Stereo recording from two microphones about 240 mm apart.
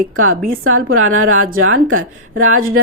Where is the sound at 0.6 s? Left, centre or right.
Right.